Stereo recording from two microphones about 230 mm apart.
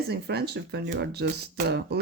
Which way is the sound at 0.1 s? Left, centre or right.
Right.